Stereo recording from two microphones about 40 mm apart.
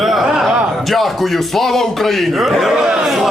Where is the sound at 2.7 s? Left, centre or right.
Centre.